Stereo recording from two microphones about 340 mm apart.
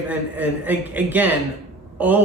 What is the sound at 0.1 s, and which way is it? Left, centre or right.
Speech, centre.